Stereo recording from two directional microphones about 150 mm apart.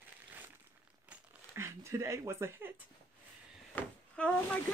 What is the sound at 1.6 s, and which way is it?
Speech, 20° right (ahead or behind).